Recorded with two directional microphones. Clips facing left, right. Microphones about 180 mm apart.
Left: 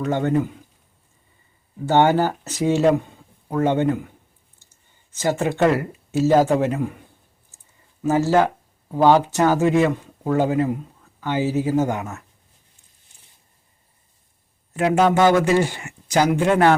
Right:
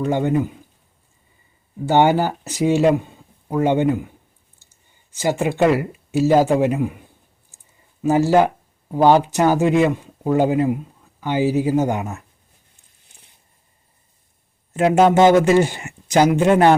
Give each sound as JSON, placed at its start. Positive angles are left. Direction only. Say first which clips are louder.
{"t": 0.0, "sound": "speech", "louder": "right 1 dB", "side_deg": -10}
{"t": 1.9, "sound": "speech", "louder": "right 1 dB", "side_deg": -10}
{"t": 5.1, "sound": "speech", "louder": "right 1 dB", "side_deg": -10}
{"t": 8.0, "sound": "speech", "louder": "right 2 dB", "side_deg": -15}
{"t": 14.7, "sound": "speech", "louder": "right 3 dB", "side_deg": -25}